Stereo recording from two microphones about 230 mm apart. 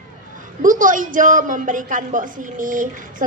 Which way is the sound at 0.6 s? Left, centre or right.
Right.